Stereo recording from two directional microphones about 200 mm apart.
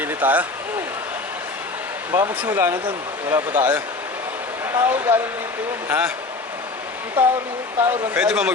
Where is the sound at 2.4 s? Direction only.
10° right (ahead or behind).